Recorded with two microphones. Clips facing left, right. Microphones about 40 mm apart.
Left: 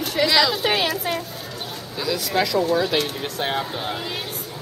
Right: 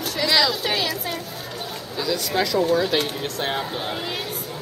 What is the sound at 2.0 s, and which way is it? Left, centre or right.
Speech, centre.